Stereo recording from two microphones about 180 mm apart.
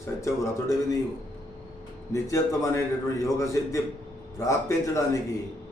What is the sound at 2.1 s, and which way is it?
A man's voice, 15° left (ahead or behind).